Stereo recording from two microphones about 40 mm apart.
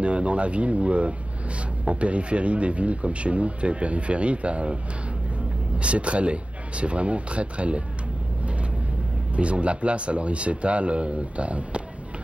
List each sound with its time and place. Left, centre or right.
0.0 s speech: right
5.8 s speech: right
9.3 s speech: right